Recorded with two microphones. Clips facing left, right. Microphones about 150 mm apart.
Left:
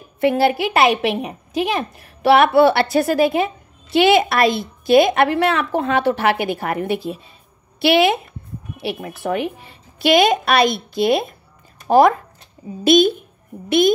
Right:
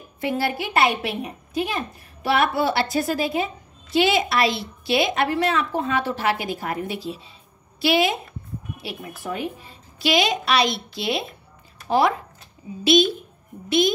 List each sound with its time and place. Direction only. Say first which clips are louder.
0.2 s a woman's voice: left 8 dB; 70° left (ahead or behind); by 7.2 s 55° left (ahead or behind)
7.8 s a woman's voice: left 5 dB; 65° left (ahead or behind)